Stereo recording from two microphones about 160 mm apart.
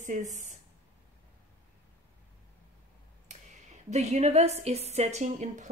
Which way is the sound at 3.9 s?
45° right (ahead or behind).